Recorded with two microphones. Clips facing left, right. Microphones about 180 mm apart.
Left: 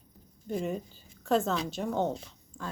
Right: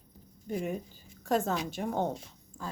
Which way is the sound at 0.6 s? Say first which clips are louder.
Left 2 dB; 10° right (ahead or behind).